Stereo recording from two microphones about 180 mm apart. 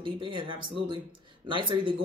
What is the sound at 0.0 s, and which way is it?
Speech, 30° right (ahead or behind).